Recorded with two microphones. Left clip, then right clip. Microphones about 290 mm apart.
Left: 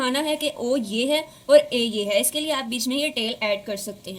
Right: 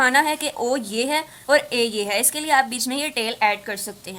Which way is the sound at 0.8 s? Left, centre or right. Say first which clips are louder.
Right 1 dB; right.